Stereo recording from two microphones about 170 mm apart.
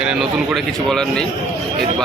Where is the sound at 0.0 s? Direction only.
5° right (ahead or behind).